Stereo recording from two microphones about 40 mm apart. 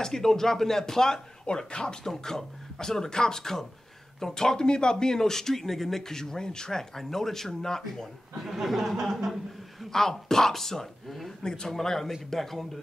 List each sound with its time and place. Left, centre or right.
0.0 s speech: centre
8.5 s a man's voice: centre